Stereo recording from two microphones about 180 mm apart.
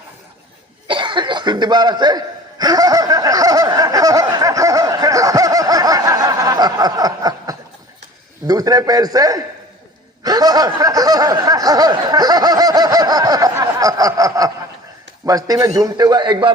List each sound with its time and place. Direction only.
0.9 s cough: 25° right (ahead or behind)
8.4 s snicker: 20° right (ahead or behind)